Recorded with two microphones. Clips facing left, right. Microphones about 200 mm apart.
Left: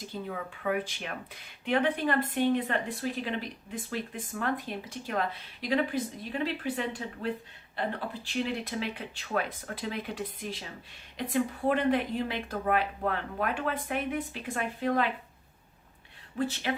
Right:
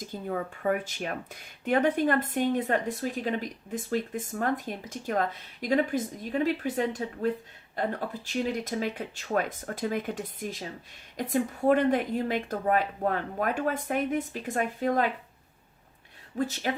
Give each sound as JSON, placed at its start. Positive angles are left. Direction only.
{"t": 0.1, "sound": "speech", "side_deg": -45}
{"t": 16.4, "sound": "speech", "side_deg": -45}